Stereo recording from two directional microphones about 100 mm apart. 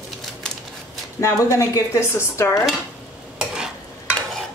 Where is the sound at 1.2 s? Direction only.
30° left (ahead or behind).